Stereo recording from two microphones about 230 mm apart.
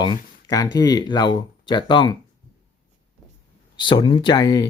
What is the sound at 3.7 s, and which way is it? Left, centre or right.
Speech, left.